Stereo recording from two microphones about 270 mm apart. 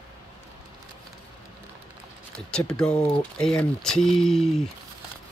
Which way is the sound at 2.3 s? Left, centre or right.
Centre.